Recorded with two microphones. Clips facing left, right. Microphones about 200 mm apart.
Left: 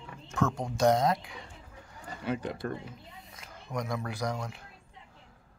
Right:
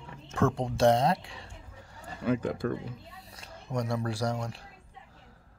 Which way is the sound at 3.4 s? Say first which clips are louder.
Right 3 dB; 30° right (ahead or behind).